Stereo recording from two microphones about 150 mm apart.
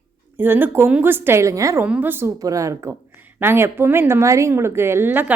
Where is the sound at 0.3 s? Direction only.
15° right (ahead or behind).